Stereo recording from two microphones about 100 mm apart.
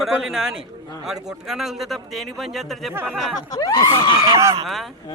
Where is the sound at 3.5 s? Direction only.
35° left (ahead or behind).